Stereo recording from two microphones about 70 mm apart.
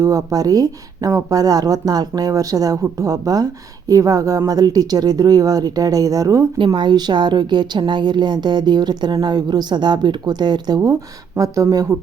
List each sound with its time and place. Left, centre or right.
0.0 s a woman's voice: right
6.7 s speech: right
9.2 s speech: right
11.3 s a woman's voice: right